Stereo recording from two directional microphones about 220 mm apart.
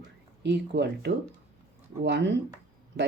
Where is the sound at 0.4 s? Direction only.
50° right (ahead or behind).